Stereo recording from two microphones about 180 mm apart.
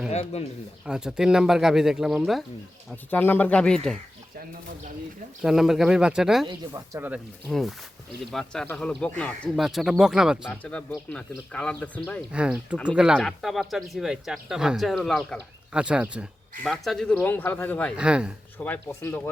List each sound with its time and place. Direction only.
0.1 s speech: 35° left (ahead or behind)
0.9 s speech: 5° right (ahead or behind)
2.9 s speech: 10° left (ahead or behind)
5.4 s speech: centre (ahead or behind)
6.5 s speech: 20° right (ahead or behind)
7.4 s speech: centre (ahead or behind)
10.6 s speech: 5° left (ahead or behind)
12.3 s speech: 5° right (ahead or behind)
17.9 s speech: 5° right (ahead or behind)
18.5 s speech: 10° left (ahead or behind)